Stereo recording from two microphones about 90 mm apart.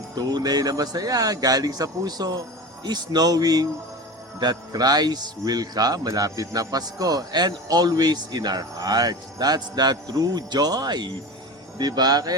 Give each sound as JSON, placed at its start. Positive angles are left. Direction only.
{"t": 0.2, "sound": "speech", "side_deg": -50}